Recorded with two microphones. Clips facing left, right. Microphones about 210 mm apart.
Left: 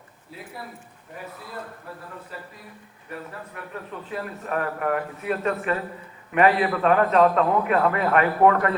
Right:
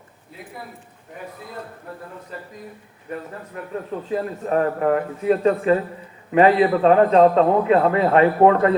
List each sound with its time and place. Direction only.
3.5 s a man's voice: 30° right (ahead or behind)